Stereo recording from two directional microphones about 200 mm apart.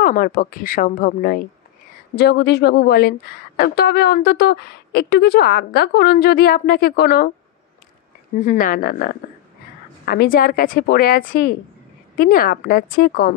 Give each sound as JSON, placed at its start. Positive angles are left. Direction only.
{"t": 0.0, "sound": "speech", "side_deg": 45}
{"t": 2.1, "sound": "speech", "side_deg": 55}
{"t": 8.4, "sound": "speech", "side_deg": 40}